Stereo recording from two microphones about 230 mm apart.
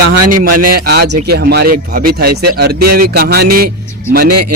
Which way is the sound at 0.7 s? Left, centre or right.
Right.